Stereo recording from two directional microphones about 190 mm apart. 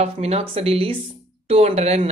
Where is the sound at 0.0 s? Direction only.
30° right (ahead or behind).